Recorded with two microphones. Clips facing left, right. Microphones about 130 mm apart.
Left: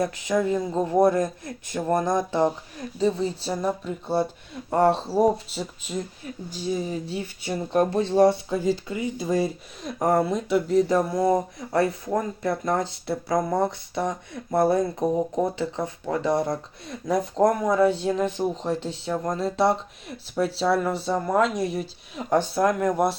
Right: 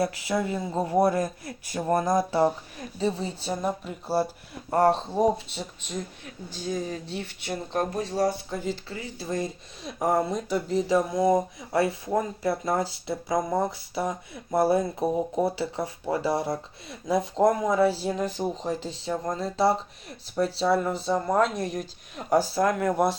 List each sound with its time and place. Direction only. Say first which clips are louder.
0.0 s speech: left 3 dB; 5° right (ahead or behind); by 7.9 s 15° left (ahead or behind)
7.9 s speech: left 8 dB; 30° left (ahead or behind)
8.6 s speech: left 7 dB; 15° left (ahead or behind)
9.8 s speech: left 3 dB; centre (ahead or behind)